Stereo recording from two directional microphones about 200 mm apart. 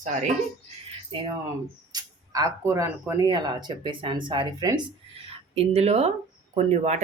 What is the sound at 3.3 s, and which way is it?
Speech, 20° right (ahead or behind).